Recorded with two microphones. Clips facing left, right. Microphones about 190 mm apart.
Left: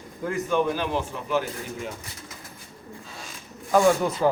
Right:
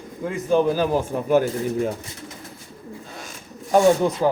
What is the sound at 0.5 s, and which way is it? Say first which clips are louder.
A man's voice: right 7 dB; 35° right (ahead or behind).